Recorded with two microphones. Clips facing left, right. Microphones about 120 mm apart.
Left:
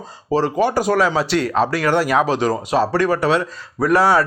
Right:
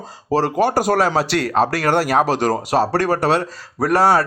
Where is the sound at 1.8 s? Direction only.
35° right (ahead or behind).